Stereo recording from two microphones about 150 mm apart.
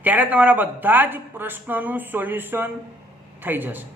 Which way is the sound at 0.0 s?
10° right (ahead or behind).